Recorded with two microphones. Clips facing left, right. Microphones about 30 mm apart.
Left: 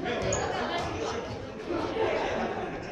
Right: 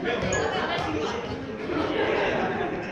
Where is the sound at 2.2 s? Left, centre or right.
Right.